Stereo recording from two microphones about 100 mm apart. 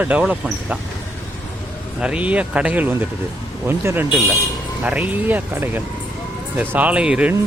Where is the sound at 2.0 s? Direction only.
10° right (ahead or behind).